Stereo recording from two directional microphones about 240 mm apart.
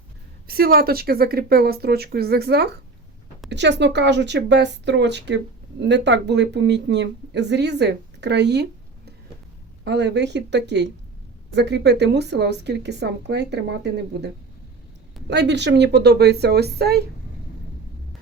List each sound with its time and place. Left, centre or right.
0.4 s speech: right
9.8 s speech: right
15.3 s speech: right